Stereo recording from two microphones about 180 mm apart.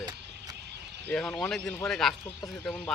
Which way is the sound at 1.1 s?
5° left (ahead or behind).